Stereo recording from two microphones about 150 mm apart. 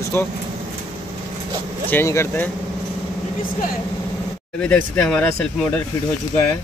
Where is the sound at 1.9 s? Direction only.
15° left (ahead or behind).